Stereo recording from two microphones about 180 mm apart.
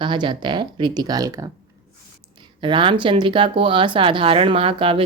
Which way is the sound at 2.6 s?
30° right (ahead or behind).